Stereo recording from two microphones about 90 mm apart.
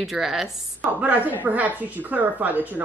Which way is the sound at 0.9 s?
15° right (ahead or behind).